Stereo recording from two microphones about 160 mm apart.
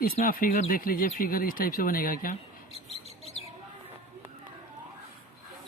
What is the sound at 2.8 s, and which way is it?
Bird, 40° left (ahead or behind).